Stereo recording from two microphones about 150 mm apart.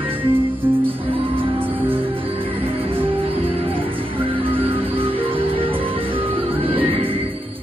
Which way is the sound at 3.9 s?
35° right (ahead or behind).